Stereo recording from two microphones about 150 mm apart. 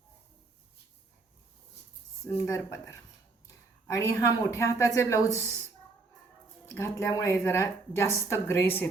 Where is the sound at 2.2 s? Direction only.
20° left (ahead or behind).